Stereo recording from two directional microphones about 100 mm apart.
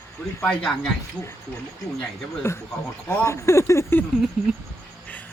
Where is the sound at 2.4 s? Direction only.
25° left (ahead or behind).